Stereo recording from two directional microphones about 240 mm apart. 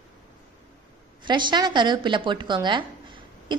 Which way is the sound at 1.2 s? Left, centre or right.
Centre.